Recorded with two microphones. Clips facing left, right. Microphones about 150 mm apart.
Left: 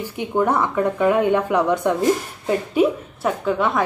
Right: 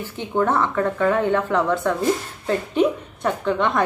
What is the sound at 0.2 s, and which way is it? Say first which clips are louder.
A woman's voice: left 1 dB; 10° left (ahead or behind).